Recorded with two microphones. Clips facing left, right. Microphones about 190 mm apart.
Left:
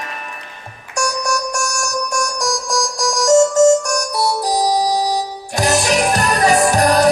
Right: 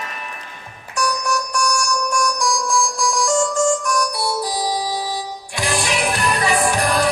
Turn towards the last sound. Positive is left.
turn(degrees=40)  # may be behind; listen again after turning